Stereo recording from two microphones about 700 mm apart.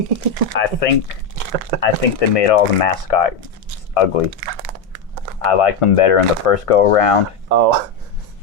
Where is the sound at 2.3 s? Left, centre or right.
Left.